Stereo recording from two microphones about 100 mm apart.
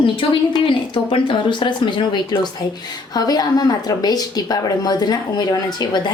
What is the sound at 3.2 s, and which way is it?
A woman's voice, 40° left (ahead or behind).